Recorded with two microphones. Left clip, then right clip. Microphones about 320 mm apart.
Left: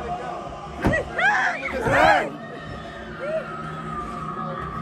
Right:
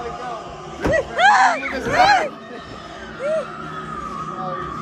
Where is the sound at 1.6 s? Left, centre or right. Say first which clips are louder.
Right 2 dB; centre.